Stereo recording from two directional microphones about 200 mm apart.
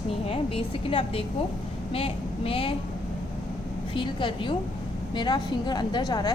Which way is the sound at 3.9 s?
25° left (ahead or behind).